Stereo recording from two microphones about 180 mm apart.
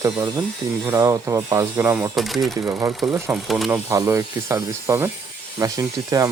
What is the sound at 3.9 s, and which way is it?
Speech, 15° right (ahead or behind).